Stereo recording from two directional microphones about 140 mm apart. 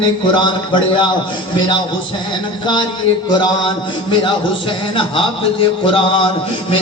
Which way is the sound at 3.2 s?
30° left (ahead or behind).